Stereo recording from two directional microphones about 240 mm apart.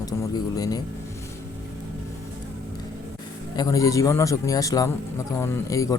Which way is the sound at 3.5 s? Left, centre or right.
Centre.